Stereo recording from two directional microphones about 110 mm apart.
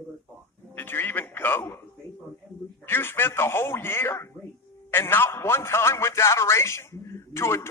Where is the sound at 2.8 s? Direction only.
20° left (ahead or behind).